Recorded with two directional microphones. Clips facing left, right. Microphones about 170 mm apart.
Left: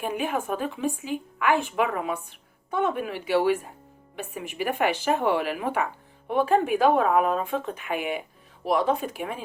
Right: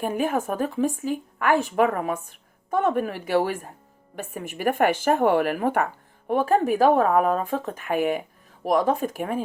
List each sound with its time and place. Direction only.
0.0 s speech: 40° right (ahead or behind)